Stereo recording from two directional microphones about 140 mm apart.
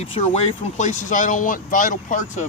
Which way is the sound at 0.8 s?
60° left (ahead or behind).